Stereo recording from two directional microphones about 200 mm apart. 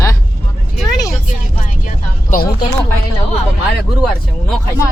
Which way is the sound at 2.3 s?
40° left (ahead or behind).